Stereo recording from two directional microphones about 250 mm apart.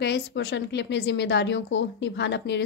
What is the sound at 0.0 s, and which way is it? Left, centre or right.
A woman's voice, left.